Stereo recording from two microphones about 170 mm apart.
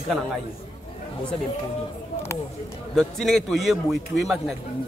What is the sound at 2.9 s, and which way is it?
A man's voice, centre (ahead or behind).